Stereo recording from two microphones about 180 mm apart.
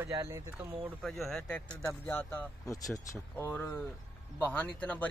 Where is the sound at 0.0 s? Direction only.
15° right (ahead or behind).